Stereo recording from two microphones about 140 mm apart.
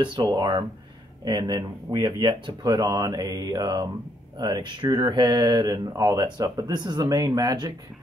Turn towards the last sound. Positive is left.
turn(degrees=-30)  # may be behind; listen again after turning